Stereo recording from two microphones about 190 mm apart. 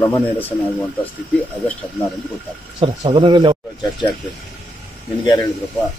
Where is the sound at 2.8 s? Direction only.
25° right (ahead or behind).